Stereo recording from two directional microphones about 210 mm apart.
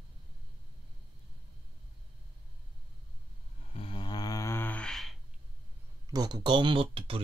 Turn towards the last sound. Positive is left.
turn(degrees=-25)  # may be behind; listen again after turning